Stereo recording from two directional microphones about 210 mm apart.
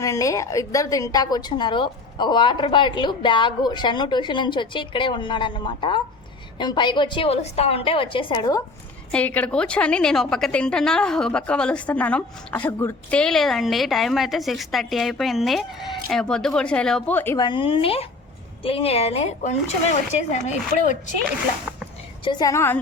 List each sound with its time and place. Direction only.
0.0 s a woman's voice: 15° left (ahead or behind)
9.1 s a woman's voice: 5° left (ahead or behind); by 20.9 s 35° left (ahead or behind)
22.2 s a woman's voice: 20° left (ahead or behind)